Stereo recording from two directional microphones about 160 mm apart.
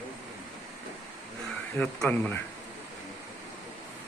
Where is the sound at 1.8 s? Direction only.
10° left (ahead or behind).